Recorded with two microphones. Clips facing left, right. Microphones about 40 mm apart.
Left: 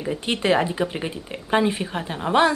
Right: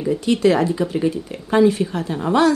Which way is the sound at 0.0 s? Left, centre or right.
Left.